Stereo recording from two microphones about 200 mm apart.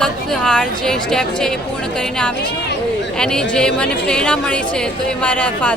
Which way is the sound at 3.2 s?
5° left (ahead or behind).